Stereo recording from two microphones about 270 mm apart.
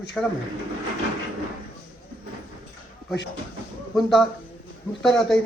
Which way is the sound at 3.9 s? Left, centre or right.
Centre.